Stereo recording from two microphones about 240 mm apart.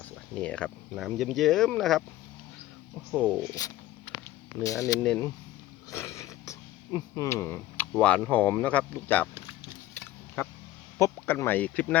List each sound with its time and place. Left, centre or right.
0.3 s speech: centre
3.1 s speech: centre
4.6 s speech: centre
5.9 s a sound: centre
9.0 s speech: centre
9.9 s a sound: centre
10.9 s speech: centre